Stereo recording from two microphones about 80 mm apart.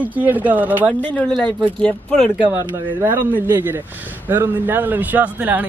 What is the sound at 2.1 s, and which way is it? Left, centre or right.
Speech, centre.